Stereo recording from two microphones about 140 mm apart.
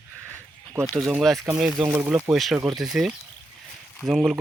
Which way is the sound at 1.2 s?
Centre (ahead or behind).